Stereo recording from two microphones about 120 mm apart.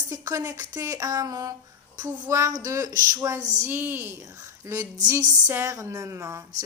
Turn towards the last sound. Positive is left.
turn(degrees=-25)  # may be behind; listen again after turning